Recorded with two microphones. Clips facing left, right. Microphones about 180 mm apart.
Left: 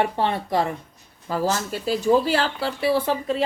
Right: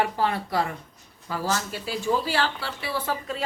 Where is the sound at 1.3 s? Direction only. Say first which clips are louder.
Left 4 dB; 40° left (ahead or behind).